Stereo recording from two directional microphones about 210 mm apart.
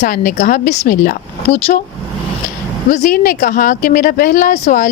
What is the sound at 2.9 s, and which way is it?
Speech, 40° left (ahead or behind).